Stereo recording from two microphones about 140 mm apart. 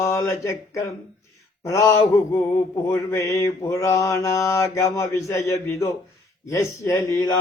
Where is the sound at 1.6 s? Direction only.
20° left (ahead or behind).